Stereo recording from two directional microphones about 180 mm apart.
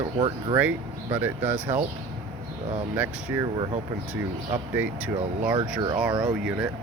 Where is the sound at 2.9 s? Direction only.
10° right (ahead or behind).